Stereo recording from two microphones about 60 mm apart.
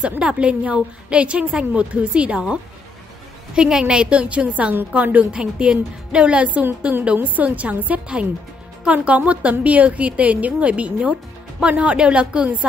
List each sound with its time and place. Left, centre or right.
0.2 s a woman's voice: centre